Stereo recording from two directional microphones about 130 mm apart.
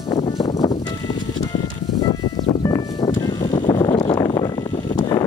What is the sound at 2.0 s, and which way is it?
Music, 35° left (ahead or behind).